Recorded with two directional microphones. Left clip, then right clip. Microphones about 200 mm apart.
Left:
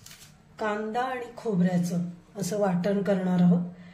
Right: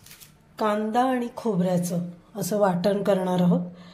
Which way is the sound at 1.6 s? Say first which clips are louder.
Right 4 dB; 35° right (ahead or behind).